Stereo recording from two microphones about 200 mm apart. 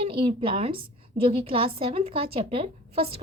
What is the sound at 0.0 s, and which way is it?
A woman's voice, 25° right (ahead or behind).